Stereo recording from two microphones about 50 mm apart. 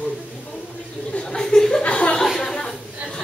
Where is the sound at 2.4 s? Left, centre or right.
Centre.